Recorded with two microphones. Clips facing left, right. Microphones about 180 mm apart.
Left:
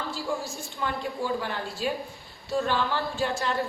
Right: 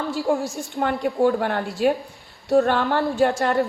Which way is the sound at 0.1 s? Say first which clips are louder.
Right 9 dB; 65° right (ahead or behind).